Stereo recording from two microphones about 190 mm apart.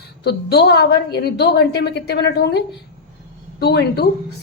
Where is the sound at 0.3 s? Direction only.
60° left (ahead or behind).